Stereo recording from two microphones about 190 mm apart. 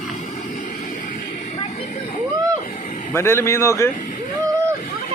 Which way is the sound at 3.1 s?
15° left (ahead or behind).